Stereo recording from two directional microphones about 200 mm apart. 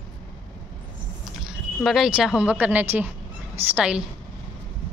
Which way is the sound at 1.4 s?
Centre (ahead or behind).